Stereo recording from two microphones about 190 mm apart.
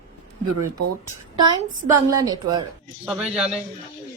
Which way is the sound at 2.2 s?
25° right (ahead or behind).